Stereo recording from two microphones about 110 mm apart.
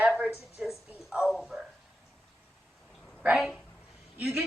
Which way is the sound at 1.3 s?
Centre (ahead or behind).